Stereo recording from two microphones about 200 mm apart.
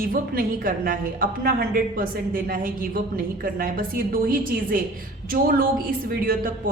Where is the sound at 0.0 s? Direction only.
45° right (ahead or behind).